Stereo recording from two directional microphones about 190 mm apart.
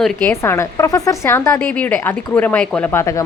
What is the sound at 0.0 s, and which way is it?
Speech, 10° left (ahead or behind).